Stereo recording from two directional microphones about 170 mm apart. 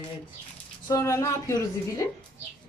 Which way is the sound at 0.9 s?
20° left (ahead or behind).